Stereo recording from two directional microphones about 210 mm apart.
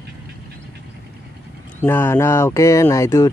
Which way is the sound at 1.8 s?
10° left (ahead or behind).